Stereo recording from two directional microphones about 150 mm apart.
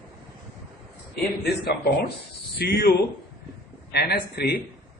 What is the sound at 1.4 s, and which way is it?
Speech, 90° left.